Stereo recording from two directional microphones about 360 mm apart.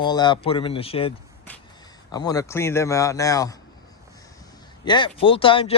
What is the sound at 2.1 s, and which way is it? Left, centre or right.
A man's voice, centre.